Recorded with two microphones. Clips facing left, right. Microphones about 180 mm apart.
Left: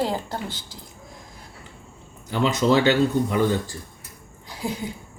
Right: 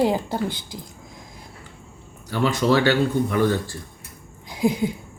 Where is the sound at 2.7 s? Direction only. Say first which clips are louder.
Left 1 dB; 20° left (ahead or behind).